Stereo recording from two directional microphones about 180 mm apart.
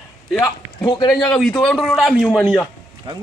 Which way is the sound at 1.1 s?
Centre (ahead or behind).